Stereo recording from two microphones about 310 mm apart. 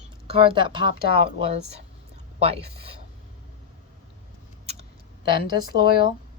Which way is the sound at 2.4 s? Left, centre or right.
Centre.